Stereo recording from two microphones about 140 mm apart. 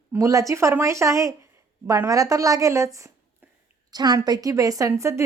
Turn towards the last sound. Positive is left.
turn(degrees=-20)  # may be behind; listen again after turning